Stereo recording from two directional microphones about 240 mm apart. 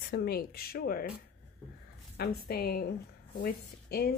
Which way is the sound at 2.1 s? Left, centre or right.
Left.